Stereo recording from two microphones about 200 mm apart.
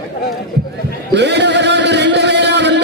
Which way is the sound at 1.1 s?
60° right (ahead or behind).